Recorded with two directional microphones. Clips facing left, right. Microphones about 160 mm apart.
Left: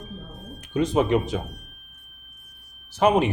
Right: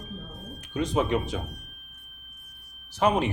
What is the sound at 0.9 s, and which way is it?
Speech, 10° left (ahead or behind).